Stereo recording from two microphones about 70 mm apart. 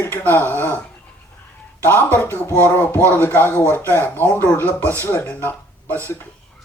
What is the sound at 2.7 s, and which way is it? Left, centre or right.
Speech, left.